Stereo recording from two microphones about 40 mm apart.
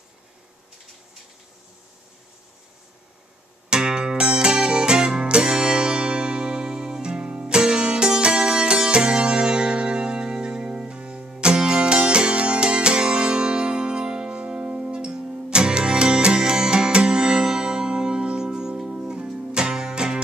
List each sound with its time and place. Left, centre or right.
3.7 s music: centre